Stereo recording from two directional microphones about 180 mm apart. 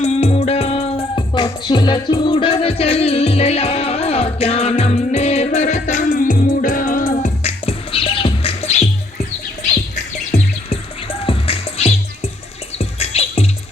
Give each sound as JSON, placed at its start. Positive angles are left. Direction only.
{"t": 0.0, "sound": "music", "side_deg": 35}
{"t": 9.9, "sound": "music", "side_deg": 40}